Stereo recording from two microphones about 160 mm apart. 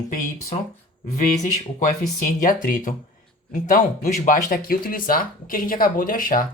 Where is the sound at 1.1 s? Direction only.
50° left (ahead or behind).